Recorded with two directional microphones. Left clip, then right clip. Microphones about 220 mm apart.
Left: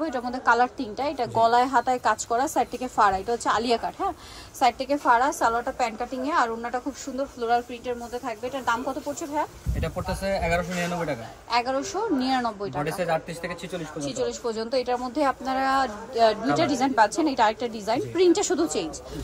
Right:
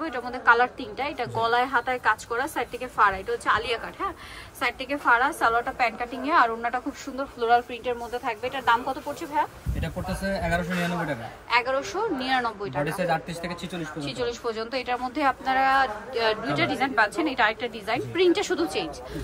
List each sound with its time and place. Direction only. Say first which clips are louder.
0.0 s a woman's voice: right 1 dB; 20° left (ahead or behind)
9.8 s speech: left 3 dB; centre (ahead or behind)
11.5 s a woman's voice: right 1 dB; 15° left (ahead or behind)
12.8 s speech: even; centre (ahead or behind)
14.0 s a woman's voice: left 1 dB; 15° left (ahead or behind)